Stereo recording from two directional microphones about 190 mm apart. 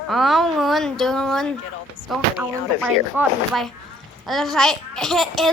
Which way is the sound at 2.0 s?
90° left.